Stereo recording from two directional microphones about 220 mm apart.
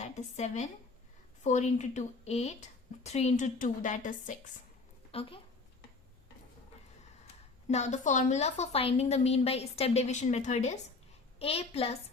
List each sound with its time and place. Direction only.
0.0 s a woman's voice: 30° left (ahead or behind)
5.1 s a child's voice: 25° left (ahead or behind)
7.7 s a woman's voice: 30° left (ahead or behind)